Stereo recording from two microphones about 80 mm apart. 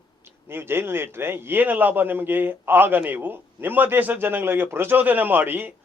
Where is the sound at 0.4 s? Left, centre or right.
Right.